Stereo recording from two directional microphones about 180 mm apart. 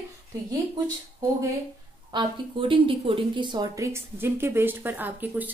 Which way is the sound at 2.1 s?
25° right (ahead or behind).